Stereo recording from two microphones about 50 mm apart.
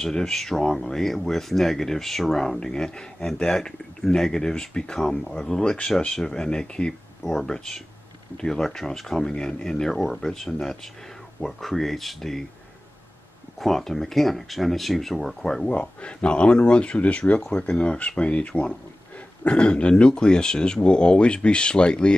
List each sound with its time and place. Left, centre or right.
0.0 s speech: centre
13.6 s speech: centre
15.7 s speech: left